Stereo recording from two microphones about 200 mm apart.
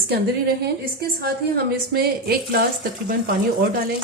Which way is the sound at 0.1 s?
50° right (ahead or behind).